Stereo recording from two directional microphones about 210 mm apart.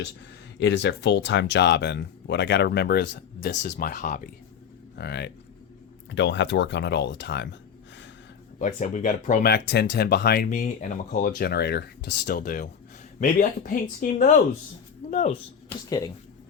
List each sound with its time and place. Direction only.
0.6 s speech: 55° left (ahead or behind)
3.5 s speech: 40° left (ahead or behind)
4.9 s speech: 55° left (ahead or behind)
8.5 s speech: 35° left (ahead or behind)
15.1 s speech: 35° left (ahead or behind)
15.9 s speech: 20° left (ahead or behind)